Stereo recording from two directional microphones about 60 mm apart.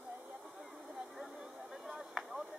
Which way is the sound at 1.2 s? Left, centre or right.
Centre.